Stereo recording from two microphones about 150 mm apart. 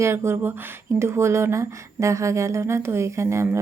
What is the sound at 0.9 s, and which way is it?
Speech, 20° right (ahead or behind).